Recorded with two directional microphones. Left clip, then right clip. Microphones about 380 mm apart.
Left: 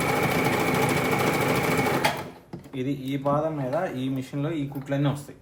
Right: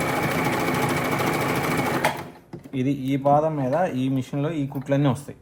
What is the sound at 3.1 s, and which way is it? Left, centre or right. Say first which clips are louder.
Speech: right 6 dB; centre.